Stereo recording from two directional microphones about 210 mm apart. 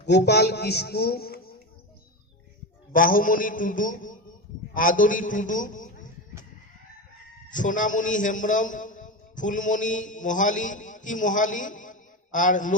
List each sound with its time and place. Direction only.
0.0 s a man's voice: 55° left (ahead or behind)
2.9 s a man's voice: 40° left (ahead or behind)
7.5 s a man's voice: 40° left (ahead or behind)